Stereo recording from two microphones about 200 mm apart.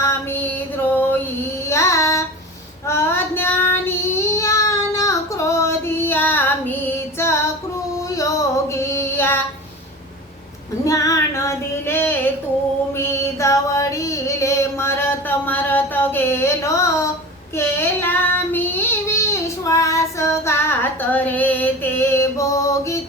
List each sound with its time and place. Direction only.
0.0 s female singing: 10° left (ahead or behind)
1.7 s child singing: 15° left (ahead or behind)
8.1 s female singing: 15° left (ahead or behind)
10.8 s child singing: 15° left (ahead or behind)
13.0 s a sound: 15° left (ahead or behind)
17.6 s child singing: 10° left (ahead or behind)